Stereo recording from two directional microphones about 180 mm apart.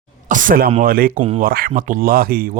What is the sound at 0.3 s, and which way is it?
Speech, 45° right (ahead or behind).